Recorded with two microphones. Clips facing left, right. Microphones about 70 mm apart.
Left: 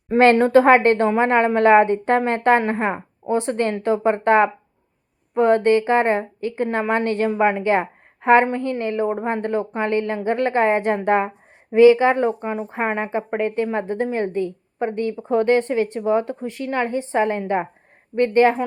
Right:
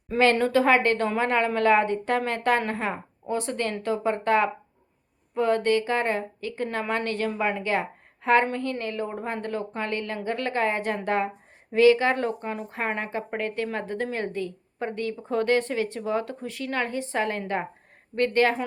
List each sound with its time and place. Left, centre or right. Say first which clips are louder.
0.1 s a woman's voice: left 7 dB; left